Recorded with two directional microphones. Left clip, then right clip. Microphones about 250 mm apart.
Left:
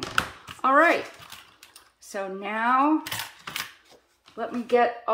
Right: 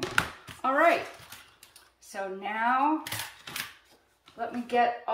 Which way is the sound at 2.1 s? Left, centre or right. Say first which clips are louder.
Left 3 dB; centre.